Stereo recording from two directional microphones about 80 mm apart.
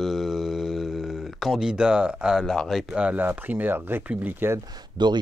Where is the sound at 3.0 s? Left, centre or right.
Right.